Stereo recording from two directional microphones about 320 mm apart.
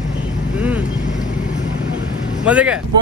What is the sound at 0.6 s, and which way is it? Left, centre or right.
Vehicle, centre.